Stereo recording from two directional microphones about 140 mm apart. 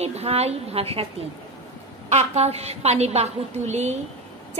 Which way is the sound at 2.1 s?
50° right (ahead or behind).